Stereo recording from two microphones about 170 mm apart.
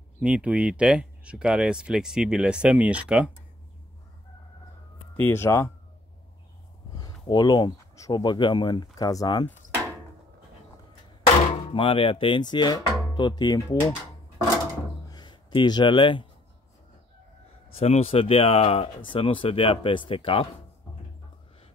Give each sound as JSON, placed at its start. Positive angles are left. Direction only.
{"t": 0.2, "sound": "speech", "side_deg": -5}
{"t": 5.1, "sound": "speech", "side_deg": 15}
{"t": 7.0, "sound": "speech", "side_deg": 25}
{"t": 11.7, "sound": "speech", "side_deg": 30}
{"t": 15.0, "sound": "a sound", "side_deg": 25}
{"t": 17.7, "sound": "speech", "side_deg": 35}